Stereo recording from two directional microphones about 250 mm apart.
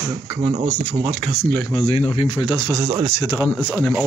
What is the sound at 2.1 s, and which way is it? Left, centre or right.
Speech, centre.